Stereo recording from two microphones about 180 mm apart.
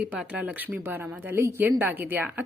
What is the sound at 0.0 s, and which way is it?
A woman's voice, 5° right (ahead or behind).